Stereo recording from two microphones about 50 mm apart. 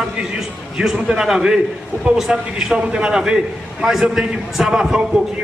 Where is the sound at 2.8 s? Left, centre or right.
Centre.